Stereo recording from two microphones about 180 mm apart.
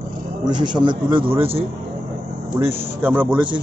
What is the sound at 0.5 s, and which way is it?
A man's voice, 25° right (ahead or behind).